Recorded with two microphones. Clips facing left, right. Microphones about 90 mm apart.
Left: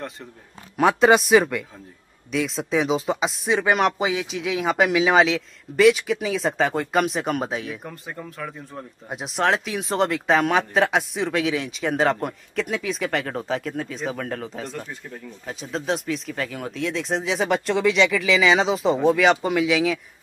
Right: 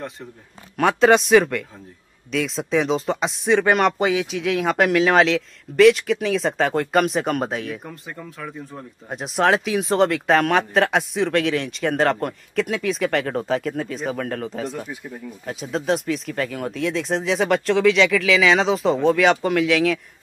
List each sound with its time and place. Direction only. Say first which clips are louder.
0.7 s speech: right 1 dB; centre (ahead or behind)